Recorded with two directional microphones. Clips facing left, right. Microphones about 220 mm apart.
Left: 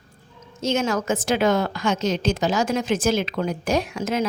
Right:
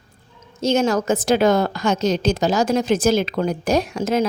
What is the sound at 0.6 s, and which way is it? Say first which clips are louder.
A woman's voice: right 4 dB; 35° right (ahead or behind).